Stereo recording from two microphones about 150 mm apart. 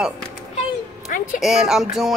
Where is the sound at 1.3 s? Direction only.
Centre (ahead or behind).